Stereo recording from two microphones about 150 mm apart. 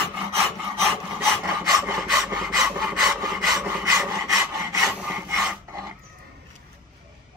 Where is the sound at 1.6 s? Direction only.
20° right (ahead or behind).